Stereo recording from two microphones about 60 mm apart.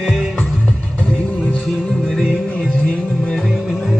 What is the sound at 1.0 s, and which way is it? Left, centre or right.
Music, left.